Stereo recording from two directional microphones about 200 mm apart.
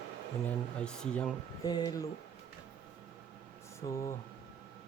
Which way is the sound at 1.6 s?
20° left (ahead or behind).